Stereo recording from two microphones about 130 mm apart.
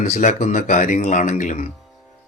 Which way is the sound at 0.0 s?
65° left (ahead or behind).